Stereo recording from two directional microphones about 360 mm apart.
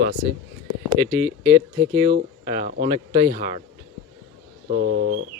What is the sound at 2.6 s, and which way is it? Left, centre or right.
Speech, right.